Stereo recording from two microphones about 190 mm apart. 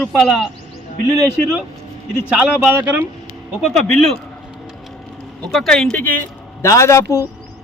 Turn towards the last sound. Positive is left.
turn(degrees=15)  # may be behind; listen again after turning